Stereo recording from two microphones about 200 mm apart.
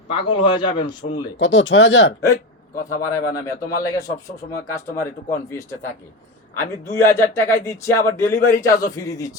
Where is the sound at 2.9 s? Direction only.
15° left (ahead or behind).